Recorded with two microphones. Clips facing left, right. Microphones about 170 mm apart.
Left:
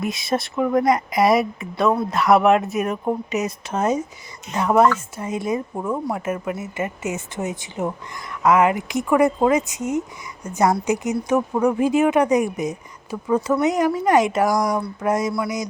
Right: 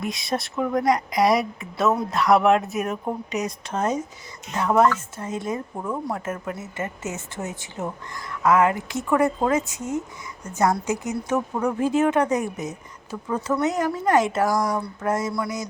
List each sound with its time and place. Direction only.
0.0 s a woman's voice: centre (ahead or behind)